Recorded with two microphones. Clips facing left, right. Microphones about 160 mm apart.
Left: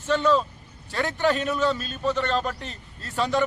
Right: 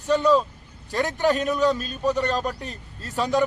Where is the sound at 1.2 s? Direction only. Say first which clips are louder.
Right 1 dB; 40° right (ahead or behind).